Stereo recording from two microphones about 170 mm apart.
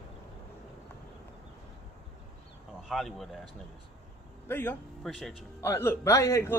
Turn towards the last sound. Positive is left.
turn(degrees=15)  # may be behind; listen again after turning